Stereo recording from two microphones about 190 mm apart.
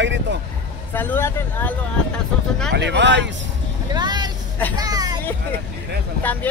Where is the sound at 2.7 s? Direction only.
65° right (ahead or behind).